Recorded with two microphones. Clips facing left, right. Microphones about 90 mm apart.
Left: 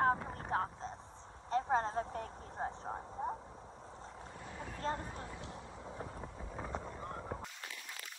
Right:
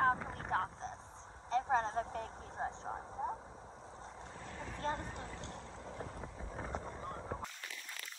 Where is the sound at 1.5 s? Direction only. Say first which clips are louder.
Even; 40° left (ahead or behind).